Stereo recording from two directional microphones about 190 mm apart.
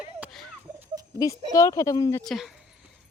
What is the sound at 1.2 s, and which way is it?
A woman's voice, 15° left (ahead or behind).